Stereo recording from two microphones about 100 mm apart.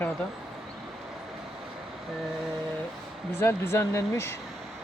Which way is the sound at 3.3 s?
25° left (ahead or behind).